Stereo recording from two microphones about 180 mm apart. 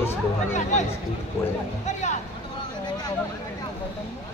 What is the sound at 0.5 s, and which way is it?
Speech, 40° left (ahead or behind).